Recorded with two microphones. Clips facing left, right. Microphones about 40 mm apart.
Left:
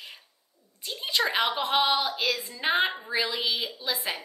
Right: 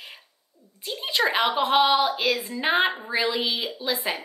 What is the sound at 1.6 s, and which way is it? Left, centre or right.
Speech, centre.